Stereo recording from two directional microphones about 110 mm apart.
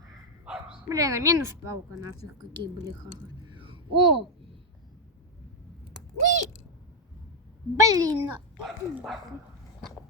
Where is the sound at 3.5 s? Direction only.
50° right (ahead or behind).